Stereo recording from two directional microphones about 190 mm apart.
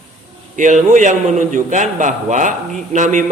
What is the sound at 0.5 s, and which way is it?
A man's voice, 40° right (ahead or behind).